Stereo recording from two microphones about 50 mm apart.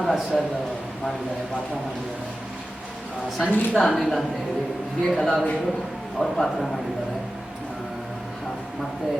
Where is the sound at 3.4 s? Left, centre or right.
Left.